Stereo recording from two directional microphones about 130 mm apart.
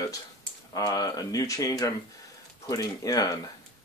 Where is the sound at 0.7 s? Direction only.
30° left (ahead or behind).